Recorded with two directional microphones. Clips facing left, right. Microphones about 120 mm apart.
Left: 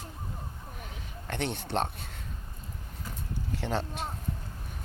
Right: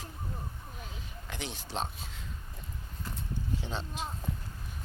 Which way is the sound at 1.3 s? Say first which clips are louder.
Left 8 dB; 60° left (ahead or behind).